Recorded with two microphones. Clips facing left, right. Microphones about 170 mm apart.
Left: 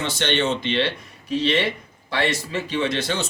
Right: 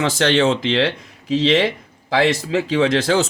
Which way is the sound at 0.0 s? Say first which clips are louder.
Right 7 dB; 90° right.